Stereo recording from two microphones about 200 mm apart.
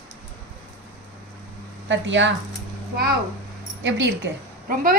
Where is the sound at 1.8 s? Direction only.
65° right (ahead or behind).